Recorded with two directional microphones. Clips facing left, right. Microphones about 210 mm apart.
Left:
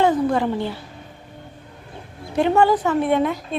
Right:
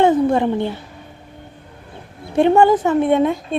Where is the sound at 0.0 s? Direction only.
25° right (ahead or behind).